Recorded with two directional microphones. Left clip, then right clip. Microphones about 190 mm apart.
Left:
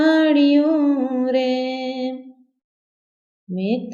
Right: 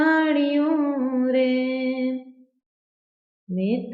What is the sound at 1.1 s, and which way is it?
Mantra, 30° left (ahead or behind).